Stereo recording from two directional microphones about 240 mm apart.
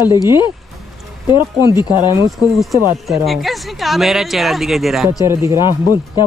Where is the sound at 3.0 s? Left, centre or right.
Centre.